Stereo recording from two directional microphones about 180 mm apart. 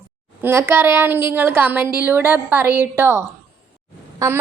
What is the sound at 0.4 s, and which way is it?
A woman's voice, 10° right (ahead or behind).